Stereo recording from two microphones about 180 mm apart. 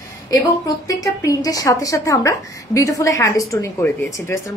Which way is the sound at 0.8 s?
20° left (ahead or behind).